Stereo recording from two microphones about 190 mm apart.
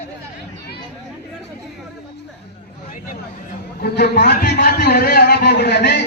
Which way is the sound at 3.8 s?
60° left (ahead or behind).